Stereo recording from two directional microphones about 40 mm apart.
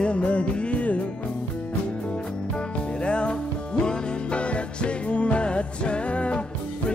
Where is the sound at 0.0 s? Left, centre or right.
Left.